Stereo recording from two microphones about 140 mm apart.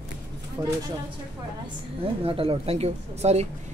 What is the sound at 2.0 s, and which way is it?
Speech, 40° right (ahead or behind).